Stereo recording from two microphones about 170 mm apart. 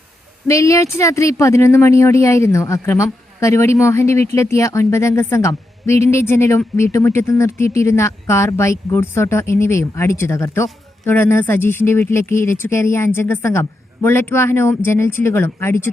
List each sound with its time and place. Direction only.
0.4 s speech: 15° left (ahead or behind)